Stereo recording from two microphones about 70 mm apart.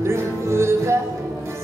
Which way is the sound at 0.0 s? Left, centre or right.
Right.